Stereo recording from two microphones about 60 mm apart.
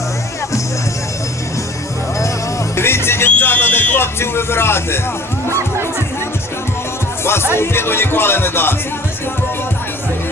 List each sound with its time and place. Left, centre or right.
2.7 s music: left
3.2 s music: left
7.3 s music: left